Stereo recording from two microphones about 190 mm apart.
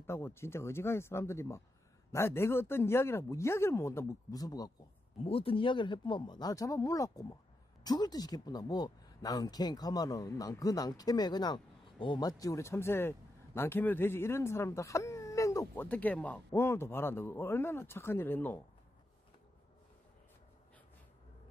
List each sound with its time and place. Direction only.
0.0 s speech: 15° left (ahead or behind)
5.2 s speech: 30° left (ahead or behind); by 18.6 s 10° left (ahead or behind)